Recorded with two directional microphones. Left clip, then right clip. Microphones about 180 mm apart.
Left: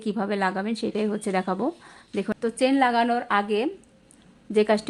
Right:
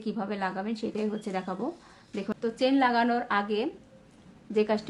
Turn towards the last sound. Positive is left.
turn(degrees=45)  # may be behind; listen again after turning